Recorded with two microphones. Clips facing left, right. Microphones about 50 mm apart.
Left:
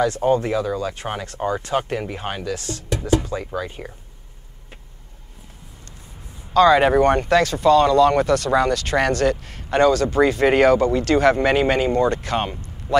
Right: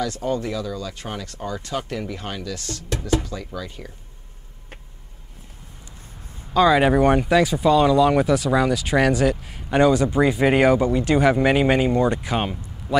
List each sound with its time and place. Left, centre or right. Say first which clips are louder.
0.0 s speech: left 6 dB; left
6.5 s speech: left 2 dB; centre
12.4 s speech: left 2 dB; centre